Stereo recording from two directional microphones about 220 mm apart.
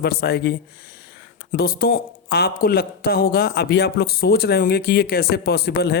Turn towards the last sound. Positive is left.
turn(degrees=45)  # may be behind; listen again after turning